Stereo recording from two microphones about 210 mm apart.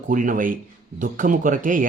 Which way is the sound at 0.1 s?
40° right (ahead or behind).